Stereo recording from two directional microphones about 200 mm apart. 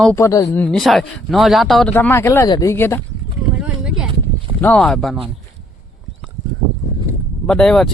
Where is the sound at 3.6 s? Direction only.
5° right (ahead or behind).